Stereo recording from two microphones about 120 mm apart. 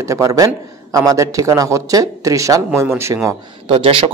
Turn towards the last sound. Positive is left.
turn(degrees=-45)  # may be behind; listen again after turning